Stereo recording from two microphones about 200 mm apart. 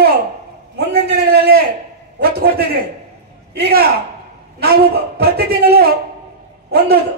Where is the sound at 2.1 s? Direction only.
50° right (ahead or behind).